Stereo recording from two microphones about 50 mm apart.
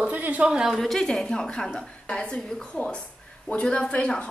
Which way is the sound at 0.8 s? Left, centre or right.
Centre.